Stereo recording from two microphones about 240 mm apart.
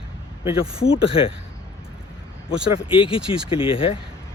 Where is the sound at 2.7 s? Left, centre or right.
Left.